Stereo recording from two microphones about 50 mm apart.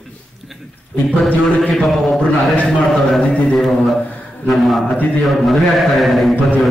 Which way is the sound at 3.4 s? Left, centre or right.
Centre.